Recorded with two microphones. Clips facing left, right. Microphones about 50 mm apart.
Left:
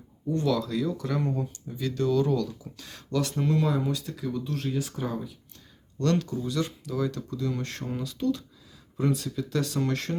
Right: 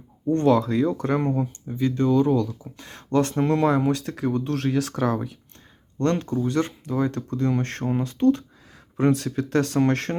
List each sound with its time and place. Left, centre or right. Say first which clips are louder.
0.3 s speech: right 7 dB; right; by 2.7 s centre
2.7 s speech: right 7 dB; right
6.0 s speech: right 4 dB; right
9.0 s speech: right 6 dB; right